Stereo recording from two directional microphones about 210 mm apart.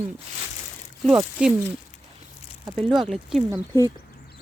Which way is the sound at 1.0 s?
5° right (ahead or behind).